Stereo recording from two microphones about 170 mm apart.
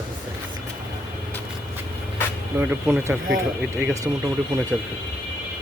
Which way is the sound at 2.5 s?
15° right (ahead or behind).